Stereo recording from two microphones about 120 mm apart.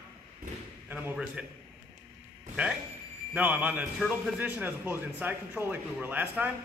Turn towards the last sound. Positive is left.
turn(degrees=-15)  # may be behind; listen again after turning